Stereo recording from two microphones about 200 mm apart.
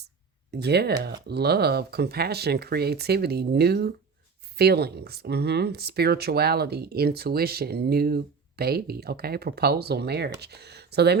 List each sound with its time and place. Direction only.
0.5 s speech: 55° right (ahead or behind)